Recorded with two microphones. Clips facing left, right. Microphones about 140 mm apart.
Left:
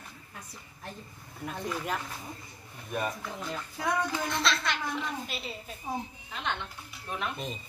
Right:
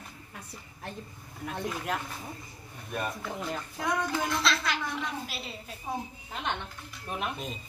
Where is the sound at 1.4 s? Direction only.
Centre (ahead or behind).